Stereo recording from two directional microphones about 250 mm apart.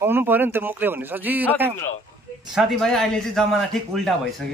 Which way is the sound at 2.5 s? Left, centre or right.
Centre.